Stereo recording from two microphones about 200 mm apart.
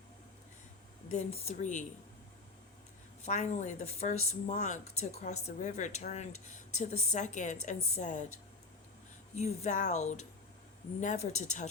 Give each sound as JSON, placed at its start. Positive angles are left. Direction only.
{"t": 1.1, "sound": "speech", "side_deg": 35}
{"t": 3.2, "sound": "speech", "side_deg": 35}
{"t": 9.3, "sound": "speech", "side_deg": 35}